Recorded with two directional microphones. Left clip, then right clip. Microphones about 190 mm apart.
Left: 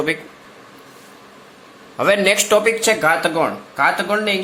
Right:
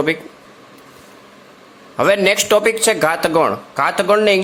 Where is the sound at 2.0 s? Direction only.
25° right (ahead or behind).